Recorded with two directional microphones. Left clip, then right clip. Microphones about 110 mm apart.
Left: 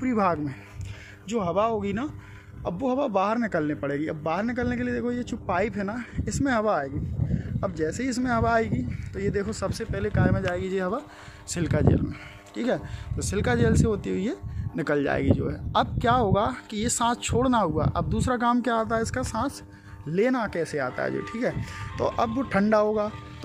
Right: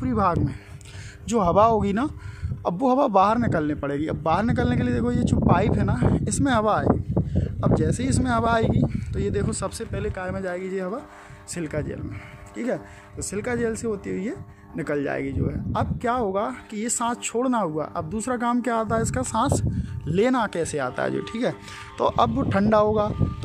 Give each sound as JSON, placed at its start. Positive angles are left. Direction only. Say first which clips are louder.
{"t": 0.0, "sound": "speech", "louder": "right 2 dB", "side_deg": -5}
{"t": 1.3, "sound": "speech", "louder": "right 7 dB", "side_deg": -50}
{"t": 3.3, "sound": "speech", "louder": "right 3 dB", "side_deg": -30}
{"t": 5.6, "sound": "speech", "louder": "right 4 dB", "side_deg": -20}
{"t": 7.6, "sound": "speech", "louder": "right 4 dB", "side_deg": -15}
{"t": 10.0, "sound": "speech", "louder": "left 3 dB", "side_deg": -5}